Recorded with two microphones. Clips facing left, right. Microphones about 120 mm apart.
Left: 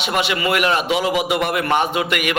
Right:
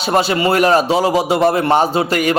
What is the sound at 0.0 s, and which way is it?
A man's voice, 35° right (ahead or behind).